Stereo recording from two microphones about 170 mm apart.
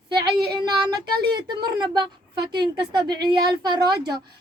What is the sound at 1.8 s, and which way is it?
Speech, 25° right (ahead or behind).